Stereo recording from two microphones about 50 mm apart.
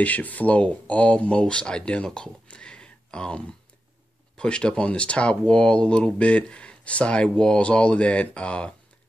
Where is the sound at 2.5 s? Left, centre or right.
Centre.